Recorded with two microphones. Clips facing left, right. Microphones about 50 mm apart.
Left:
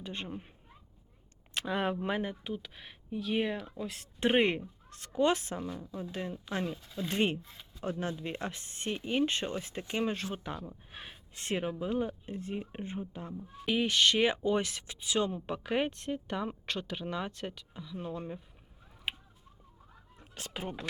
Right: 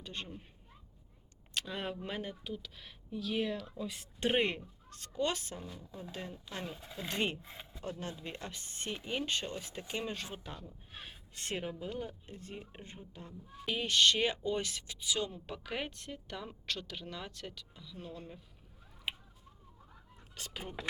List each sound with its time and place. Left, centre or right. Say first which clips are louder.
0.0 s speech: left 5 dB; left
1.5 s speech: left 7 dB; left
3.8 s speech: left 2 dB; left
4.2 s speech: left 4 dB; left
6.7 s speech: left 5 dB; centre
7.1 s speech: left 5 dB; left
7.4 s speech: right 3 dB; right
7.9 s speech: left 7 dB; left
10.9 s speech: left 2 dB; centre
11.3 s speech: left 5 dB; left
20.4 s speech: left 5 dB; left